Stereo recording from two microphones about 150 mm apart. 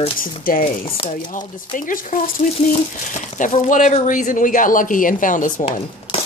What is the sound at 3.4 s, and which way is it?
Speech, 60° left (ahead or behind).